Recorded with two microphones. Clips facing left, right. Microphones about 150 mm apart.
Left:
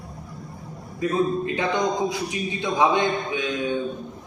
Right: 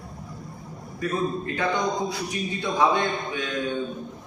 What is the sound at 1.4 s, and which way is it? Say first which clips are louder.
A man's voice: left 2 dB; 20° left (ahead or behind).